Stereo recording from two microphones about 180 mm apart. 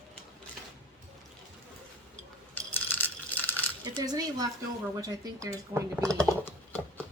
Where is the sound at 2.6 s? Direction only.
10° left (ahead or behind).